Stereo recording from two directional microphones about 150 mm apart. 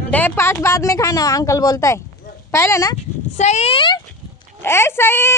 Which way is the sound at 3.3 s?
50° left (ahead or behind).